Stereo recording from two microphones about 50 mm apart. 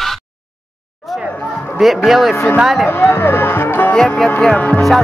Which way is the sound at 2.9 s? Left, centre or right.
Left.